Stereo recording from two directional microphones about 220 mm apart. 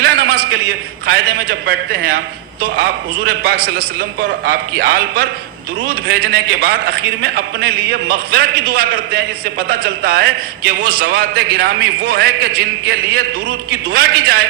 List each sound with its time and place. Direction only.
0.0 s a man's voice: 45° right (ahead or behind)